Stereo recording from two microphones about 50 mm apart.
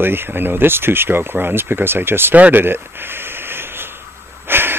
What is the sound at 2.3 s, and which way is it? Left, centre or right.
Speech, right.